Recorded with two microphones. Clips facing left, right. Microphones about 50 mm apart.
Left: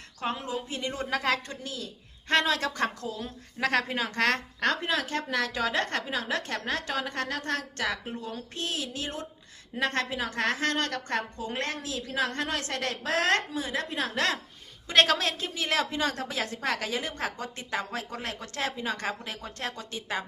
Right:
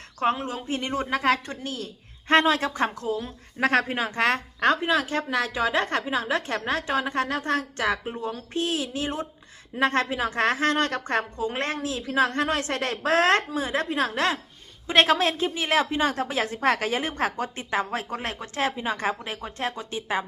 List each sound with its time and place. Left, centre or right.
0.2 s a woman's voice: right